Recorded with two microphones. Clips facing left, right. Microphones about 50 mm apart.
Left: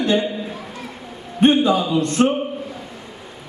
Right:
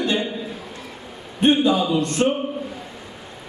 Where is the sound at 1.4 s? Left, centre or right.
Left.